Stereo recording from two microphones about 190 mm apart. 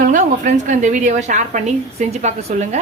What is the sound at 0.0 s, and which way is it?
A woman's voice, 40° right (ahead or behind).